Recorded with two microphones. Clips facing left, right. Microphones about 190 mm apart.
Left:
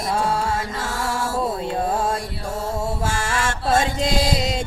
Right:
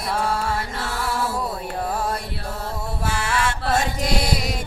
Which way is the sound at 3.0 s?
45° left (ahead or behind).